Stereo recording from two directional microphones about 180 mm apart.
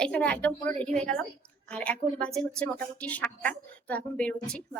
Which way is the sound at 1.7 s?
5° left (ahead or behind).